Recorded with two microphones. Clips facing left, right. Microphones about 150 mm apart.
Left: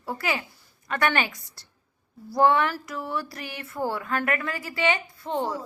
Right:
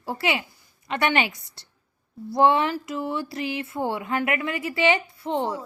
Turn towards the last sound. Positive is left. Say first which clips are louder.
# right 2 dB
turn(degrees=-20)  # may be behind; listen again after turning